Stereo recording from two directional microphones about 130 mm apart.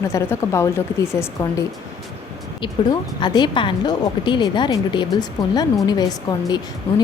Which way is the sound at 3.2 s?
35° left (ahead or behind).